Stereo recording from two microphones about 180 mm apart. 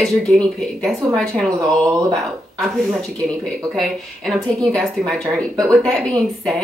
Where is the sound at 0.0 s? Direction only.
Centre (ahead or behind).